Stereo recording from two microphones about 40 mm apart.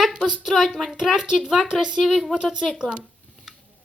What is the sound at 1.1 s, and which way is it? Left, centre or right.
Speech, centre.